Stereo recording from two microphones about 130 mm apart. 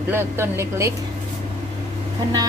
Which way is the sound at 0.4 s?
20° right (ahead or behind).